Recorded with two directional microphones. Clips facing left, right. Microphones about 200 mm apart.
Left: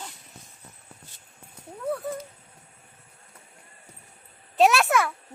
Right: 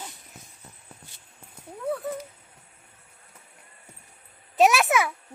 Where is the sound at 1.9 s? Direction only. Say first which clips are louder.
Even; centre (ahead or behind).